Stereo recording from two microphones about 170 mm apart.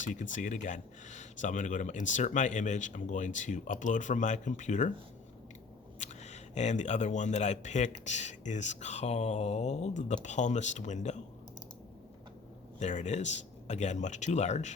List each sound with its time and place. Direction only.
0.1 s speech: 45° left (ahead or behind)
6.0 s speech: 45° left (ahead or behind)
12.8 s speech: 45° left (ahead or behind)